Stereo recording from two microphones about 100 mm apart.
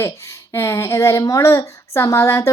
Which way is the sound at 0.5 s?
25° left (ahead or behind).